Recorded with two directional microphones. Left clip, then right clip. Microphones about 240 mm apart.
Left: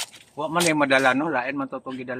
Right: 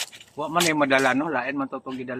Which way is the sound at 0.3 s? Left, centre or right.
Left.